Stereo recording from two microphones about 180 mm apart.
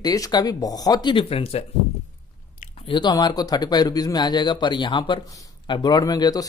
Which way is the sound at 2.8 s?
25° left (ahead or behind).